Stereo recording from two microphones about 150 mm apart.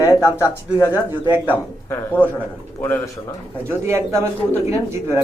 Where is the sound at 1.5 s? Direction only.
15° left (ahead or behind).